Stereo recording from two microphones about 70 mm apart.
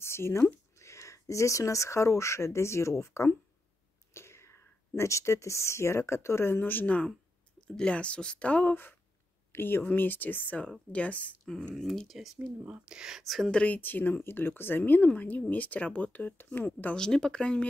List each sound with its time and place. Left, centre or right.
0.0 s speech: left
7.6 s speech: centre
11.7 s speech: centre
12.4 s speech: centre
13.5 s speech: centre
13.7 s speech: left
16.9 s speech: centre